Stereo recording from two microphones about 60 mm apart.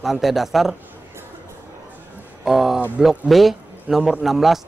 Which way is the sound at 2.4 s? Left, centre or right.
Centre.